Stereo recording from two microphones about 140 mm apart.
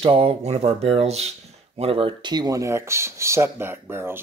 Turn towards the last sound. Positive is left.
turn(degrees=-15)  # may be behind; listen again after turning